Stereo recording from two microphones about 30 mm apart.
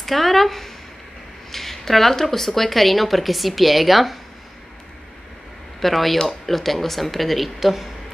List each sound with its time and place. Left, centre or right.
0.0 s speech: centre
5.8 s speech: centre